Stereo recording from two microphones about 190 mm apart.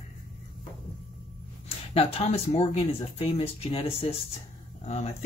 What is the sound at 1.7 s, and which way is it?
Speech, 30° left (ahead or behind).